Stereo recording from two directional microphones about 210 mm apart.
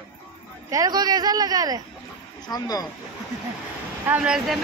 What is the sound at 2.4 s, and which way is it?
Speech, 20° left (ahead or behind).